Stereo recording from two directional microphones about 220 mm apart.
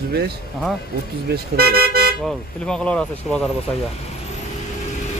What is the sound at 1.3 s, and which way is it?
Speech, 45° right (ahead or behind).